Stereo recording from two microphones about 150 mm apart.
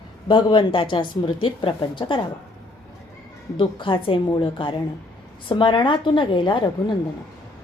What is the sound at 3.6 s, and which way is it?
A woman's voice, 35° left (ahead or behind).